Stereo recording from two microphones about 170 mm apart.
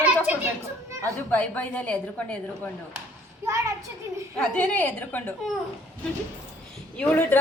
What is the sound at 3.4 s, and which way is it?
Speech, 20° right (ahead or behind).